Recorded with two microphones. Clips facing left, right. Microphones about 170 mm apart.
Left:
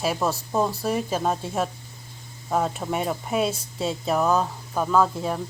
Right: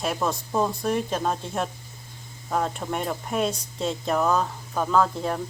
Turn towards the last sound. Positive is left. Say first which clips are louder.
# left 1 dB
turn(degrees=5)  # may be behind; listen again after turning